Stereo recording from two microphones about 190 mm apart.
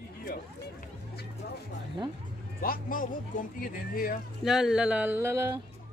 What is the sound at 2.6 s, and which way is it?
Speech, 45° left (ahead or behind).